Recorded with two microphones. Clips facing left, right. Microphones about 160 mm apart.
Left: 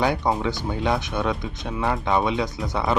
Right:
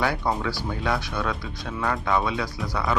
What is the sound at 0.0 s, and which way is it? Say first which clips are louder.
Speech: left 3 dB; 20° left (ahead or behind).